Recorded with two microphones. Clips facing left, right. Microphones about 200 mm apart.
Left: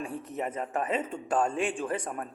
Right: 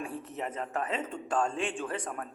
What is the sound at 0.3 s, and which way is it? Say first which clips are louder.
A man's voice: left 3 dB; 10° left (ahead or behind).